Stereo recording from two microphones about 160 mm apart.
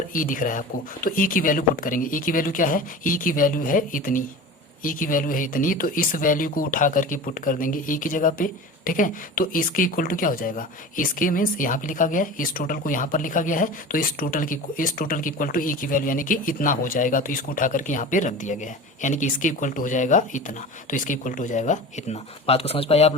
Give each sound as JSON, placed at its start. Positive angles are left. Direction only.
{"t": 0.1, "sound": "speech", "side_deg": 55}